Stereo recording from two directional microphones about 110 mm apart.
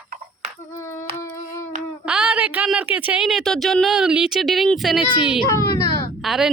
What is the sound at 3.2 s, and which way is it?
A woman's voice, centre (ahead or behind).